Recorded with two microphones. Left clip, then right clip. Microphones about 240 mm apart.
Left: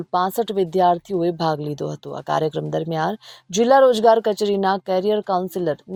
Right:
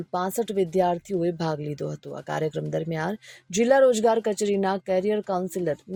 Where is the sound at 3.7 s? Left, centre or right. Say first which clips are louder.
Left 6 dB; centre.